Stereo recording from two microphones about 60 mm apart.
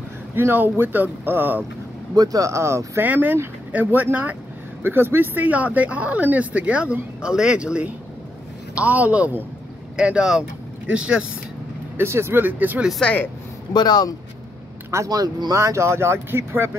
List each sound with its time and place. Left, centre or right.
0.4 s speech: right
2.1 s speech: right
2.5 s speech: right
3.0 s speech: right; by 11.2 s centre
12.0 s speech: right
13.0 s speech: left
15.0 s speech: right